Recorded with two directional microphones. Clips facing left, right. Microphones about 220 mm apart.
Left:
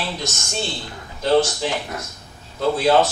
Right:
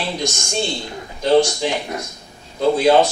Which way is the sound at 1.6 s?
15° right (ahead or behind).